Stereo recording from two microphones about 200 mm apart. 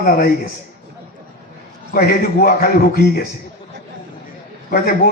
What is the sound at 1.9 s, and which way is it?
A man's voice, 50° left (ahead or behind).